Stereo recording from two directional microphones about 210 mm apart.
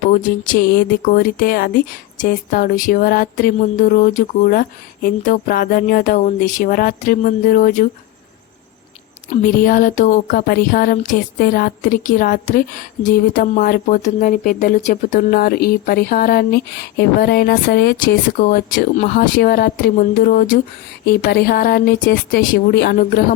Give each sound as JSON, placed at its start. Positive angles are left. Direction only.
{"t": 0.1, "sound": "speech", "side_deg": 40}
{"t": 9.3, "sound": "a woman's voice", "side_deg": 40}